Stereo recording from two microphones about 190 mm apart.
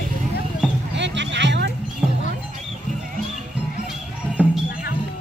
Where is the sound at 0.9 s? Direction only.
70° right (ahead or behind).